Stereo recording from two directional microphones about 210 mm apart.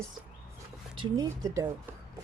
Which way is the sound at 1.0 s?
15° right (ahead or behind).